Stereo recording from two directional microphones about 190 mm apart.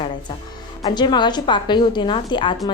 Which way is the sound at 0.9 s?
25° left (ahead or behind).